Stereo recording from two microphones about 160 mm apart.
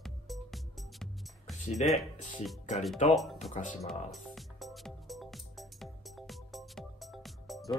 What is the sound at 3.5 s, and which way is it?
Speech, 50° left (ahead or behind).